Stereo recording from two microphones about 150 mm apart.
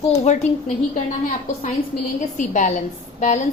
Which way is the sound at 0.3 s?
50° left (ahead or behind).